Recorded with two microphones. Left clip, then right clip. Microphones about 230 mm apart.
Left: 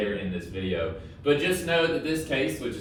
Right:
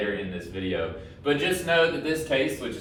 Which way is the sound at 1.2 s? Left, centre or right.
Centre.